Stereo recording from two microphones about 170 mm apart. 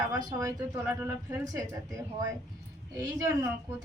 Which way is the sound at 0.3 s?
15° right (ahead or behind).